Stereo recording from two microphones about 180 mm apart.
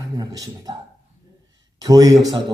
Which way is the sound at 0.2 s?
20° right (ahead or behind).